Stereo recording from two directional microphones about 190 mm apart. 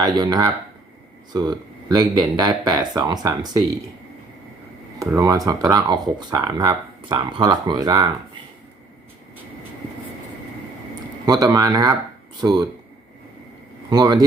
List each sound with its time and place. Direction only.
0.0 s speech: 20° right (ahead or behind)
4.9 s speech: 15° right (ahead or behind)
11.3 s speech: 20° right (ahead or behind)
13.9 s speech: 20° right (ahead or behind)